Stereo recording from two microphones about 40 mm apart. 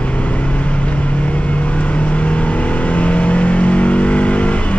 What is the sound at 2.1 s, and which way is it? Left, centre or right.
Vehicle, left.